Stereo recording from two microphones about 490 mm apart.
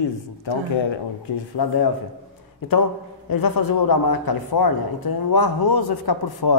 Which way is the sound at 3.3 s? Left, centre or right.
Left.